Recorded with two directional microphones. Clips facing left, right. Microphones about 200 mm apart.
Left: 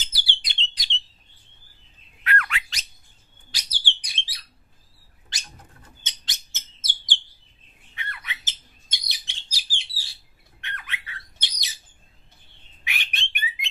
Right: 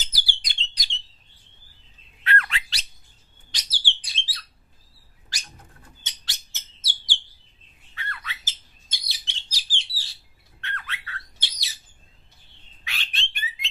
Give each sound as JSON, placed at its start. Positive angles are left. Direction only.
{"t": 0.0, "sound": "bird", "side_deg": -40}
{"t": 2.2, "sound": "bird", "side_deg": -30}
{"t": 3.5, "sound": "bird", "side_deg": 15}
{"t": 6.0, "sound": "bird", "side_deg": 20}
{"t": 9.1, "sound": "chirp", "side_deg": 10}
{"t": 10.6, "sound": "squawk", "side_deg": 15}
{"t": 12.8, "sound": "bird", "side_deg": 15}